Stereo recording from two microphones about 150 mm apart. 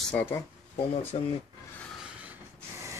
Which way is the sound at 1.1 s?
45° left (ahead or behind).